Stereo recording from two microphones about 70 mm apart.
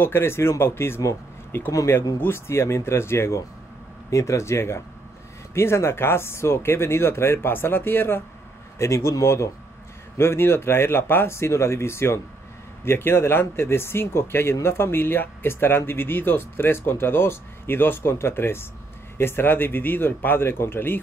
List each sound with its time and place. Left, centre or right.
0.0 s speech: left
8.7 s speech: left